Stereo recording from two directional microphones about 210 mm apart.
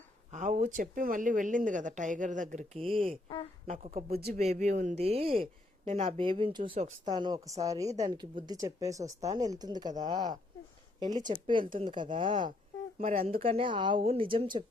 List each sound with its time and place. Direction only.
0.3 s speech: 35° right (ahead or behind)
3.7 s speech: 40° right (ahead or behind)
4.4 s speech: 35° right (ahead or behind)
7.1 s a woman's voice: 20° right (ahead or behind)
11.3 s speech: 25° right (ahead or behind)